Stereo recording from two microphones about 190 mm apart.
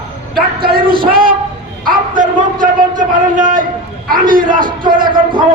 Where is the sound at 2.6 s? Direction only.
45° right (ahead or behind).